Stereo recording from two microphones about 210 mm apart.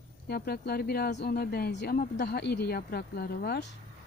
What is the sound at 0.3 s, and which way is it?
Speech, 50° left (ahead or behind).